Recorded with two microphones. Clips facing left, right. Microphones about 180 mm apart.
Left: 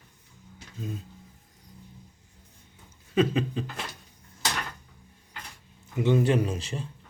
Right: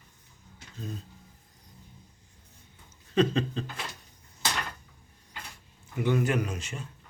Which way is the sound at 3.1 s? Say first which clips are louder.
Left 1 dB; 10° left (ahead or behind).